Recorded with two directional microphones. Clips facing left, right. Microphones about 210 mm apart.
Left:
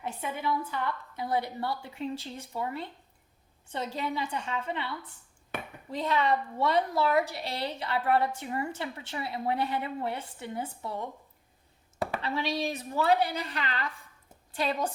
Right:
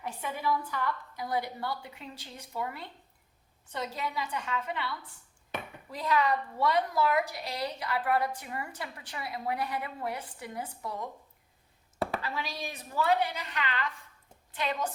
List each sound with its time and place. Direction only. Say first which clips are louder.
0.0 s a woman's voice: left 1 dB; 25° left (ahead or behind)
5.9 s a woman's voice: left 1 dB; 25° left (ahead or behind)
12.2 s a woman's voice: left 6 dB; 25° left (ahead or behind)